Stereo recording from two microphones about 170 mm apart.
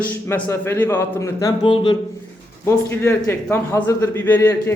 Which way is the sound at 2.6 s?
15° left (ahead or behind).